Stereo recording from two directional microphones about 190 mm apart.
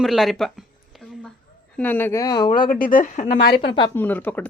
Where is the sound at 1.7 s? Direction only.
10° left (ahead or behind).